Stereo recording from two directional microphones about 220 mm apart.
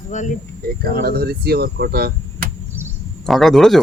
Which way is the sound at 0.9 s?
45° right (ahead or behind).